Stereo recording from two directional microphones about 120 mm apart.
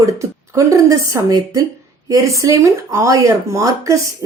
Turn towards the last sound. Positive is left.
turn(degrees=-25)  # may be behind; listen again after turning